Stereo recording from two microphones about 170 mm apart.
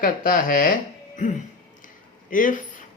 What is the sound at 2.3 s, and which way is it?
Speech, 50° left (ahead or behind).